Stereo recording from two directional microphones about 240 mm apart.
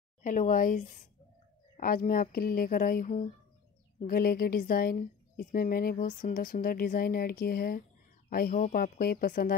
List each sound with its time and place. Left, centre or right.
0.2 s speech: left